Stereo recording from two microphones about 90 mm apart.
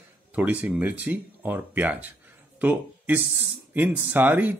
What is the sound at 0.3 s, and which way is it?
Speech, 20° right (ahead or behind).